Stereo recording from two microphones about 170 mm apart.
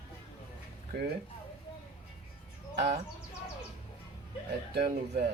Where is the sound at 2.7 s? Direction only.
80° right.